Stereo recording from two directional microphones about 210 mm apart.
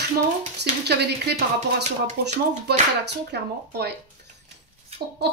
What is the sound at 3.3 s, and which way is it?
Speech, 50° right (ahead or behind).